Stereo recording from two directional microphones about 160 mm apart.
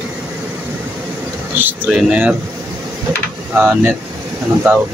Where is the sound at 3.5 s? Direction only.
10° right (ahead or behind).